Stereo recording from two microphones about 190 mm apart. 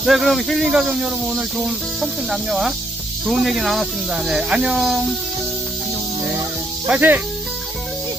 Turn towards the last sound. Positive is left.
turn(degrees=-10)  # may be behind; listen again after turning